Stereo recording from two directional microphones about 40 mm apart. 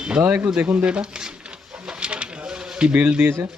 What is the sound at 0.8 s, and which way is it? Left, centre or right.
Speech, right.